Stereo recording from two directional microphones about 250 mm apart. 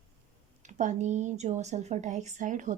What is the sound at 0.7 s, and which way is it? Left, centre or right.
A woman's voice, right.